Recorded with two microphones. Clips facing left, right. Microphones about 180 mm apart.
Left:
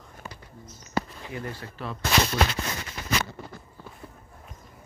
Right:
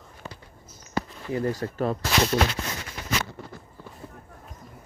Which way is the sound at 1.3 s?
40° right (ahead or behind).